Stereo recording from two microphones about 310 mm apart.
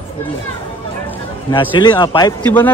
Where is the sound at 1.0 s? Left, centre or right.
Centre.